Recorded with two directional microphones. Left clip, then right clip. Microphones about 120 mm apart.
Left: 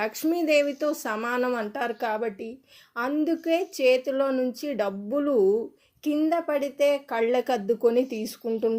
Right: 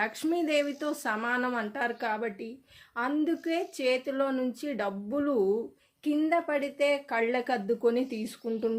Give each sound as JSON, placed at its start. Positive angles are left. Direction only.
{"t": 0.0, "sound": "speech", "side_deg": 25}